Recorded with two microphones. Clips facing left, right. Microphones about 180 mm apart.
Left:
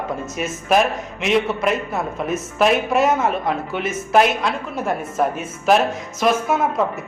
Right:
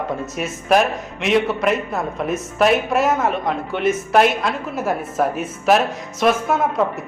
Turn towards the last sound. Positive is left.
turn(degrees=0)  # may be behind; listen again after turning